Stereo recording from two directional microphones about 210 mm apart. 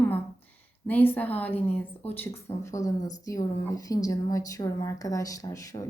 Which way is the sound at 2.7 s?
15° left (ahead or behind).